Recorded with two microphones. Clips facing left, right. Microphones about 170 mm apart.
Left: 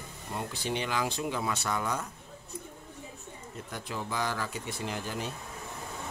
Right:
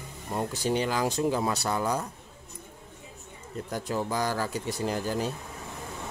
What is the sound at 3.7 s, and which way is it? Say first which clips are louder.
Speech: right 5 dB; 40° right (ahead or behind).